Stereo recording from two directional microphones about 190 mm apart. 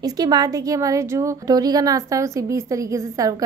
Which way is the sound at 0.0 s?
20° right (ahead or behind).